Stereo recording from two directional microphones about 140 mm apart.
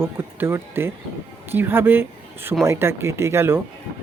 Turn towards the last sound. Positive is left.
turn(degrees=-20)  # may be behind; listen again after turning